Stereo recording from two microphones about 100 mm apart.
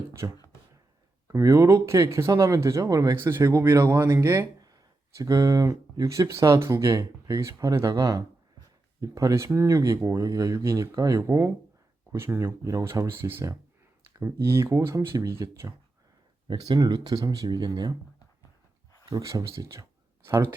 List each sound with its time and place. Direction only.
1.3 s speech: 30° right (ahead or behind)
3.2 s speech: 25° right (ahead or behind)
16.5 s speech: 40° right (ahead or behind)
19.0 s speech: 30° right (ahead or behind)